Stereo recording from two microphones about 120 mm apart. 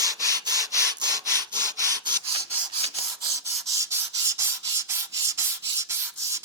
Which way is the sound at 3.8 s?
25° right (ahead or behind).